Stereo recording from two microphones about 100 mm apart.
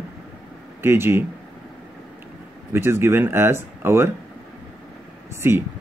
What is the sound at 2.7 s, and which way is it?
Speech, 25° right (ahead or behind).